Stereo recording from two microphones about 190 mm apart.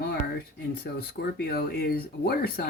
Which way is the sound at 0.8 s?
55° left (ahead or behind).